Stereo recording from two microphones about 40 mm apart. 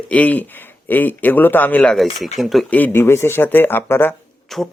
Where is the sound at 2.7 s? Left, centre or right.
Left.